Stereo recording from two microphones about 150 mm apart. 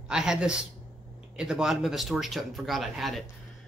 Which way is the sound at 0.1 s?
5° right (ahead or behind).